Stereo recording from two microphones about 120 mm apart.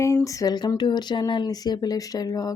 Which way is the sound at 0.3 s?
30° left (ahead or behind).